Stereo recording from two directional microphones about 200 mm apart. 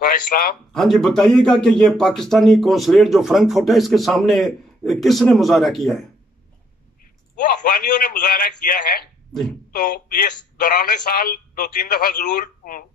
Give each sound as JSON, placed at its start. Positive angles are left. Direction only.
{"t": 0.0, "sound": "speech", "side_deg": 45}
{"t": 0.7, "sound": "a man's voice", "side_deg": 0}
{"t": 7.3, "sound": "speech", "side_deg": 40}